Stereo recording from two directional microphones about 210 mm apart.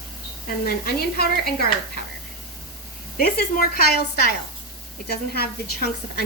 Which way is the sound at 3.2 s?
45° left (ahead or behind).